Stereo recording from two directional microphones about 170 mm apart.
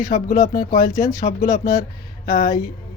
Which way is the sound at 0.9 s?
20° left (ahead or behind).